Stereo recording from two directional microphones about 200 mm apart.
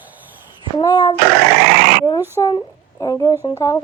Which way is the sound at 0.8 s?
20° left (ahead or behind).